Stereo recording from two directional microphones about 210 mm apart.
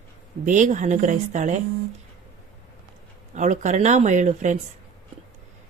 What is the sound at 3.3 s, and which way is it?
Speech, 35° right (ahead or behind).